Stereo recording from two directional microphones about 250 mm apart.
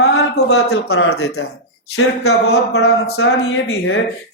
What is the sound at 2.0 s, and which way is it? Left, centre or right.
Speech, left.